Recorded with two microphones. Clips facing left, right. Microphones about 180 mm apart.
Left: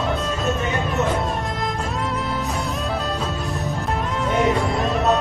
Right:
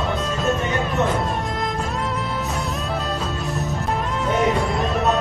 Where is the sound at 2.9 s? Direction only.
Centre (ahead or behind).